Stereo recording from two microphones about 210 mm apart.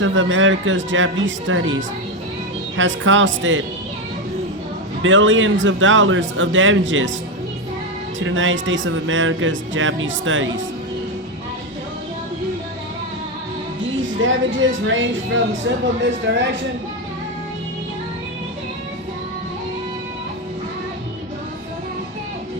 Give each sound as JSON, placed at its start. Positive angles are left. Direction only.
{"t": 0.0, "sound": "speech", "side_deg": -65}
{"t": 5.0, "sound": "speech", "side_deg": -65}
{"t": 8.2, "sound": "speech", "side_deg": -65}
{"t": 14.0, "sound": "speech", "side_deg": -65}